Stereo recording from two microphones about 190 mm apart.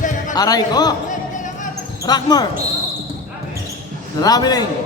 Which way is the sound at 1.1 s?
40° left (ahead or behind).